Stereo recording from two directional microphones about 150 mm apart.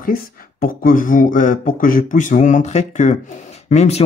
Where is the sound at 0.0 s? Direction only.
80° left.